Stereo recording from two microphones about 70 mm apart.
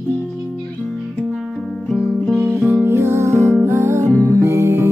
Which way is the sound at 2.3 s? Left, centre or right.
Right.